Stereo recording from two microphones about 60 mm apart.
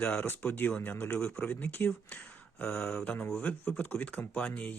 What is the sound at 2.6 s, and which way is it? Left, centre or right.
Speech, centre.